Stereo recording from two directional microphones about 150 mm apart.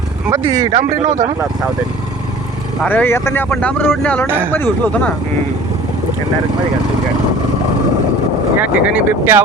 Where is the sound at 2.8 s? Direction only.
10° left (ahead or behind).